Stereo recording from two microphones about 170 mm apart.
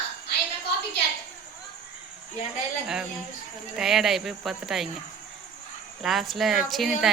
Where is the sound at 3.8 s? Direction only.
Centre (ahead or behind).